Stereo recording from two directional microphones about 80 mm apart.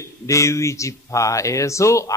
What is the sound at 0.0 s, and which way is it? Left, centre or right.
A man's voice, left.